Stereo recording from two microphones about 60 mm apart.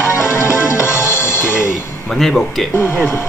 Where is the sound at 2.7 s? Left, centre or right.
Left.